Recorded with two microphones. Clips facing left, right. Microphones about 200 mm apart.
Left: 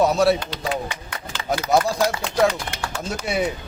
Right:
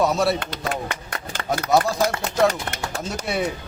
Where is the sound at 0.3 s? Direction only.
55° right (ahead or behind).